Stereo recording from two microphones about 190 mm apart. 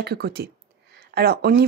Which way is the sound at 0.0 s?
55° right (ahead or behind).